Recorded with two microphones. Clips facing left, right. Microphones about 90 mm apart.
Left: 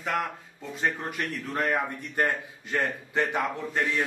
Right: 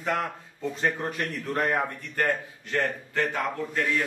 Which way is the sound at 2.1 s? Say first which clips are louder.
Even; 15° left (ahead or behind).